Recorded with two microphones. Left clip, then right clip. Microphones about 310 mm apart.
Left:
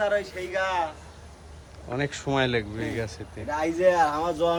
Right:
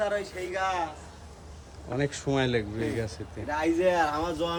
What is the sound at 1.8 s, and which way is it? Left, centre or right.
Speech, centre.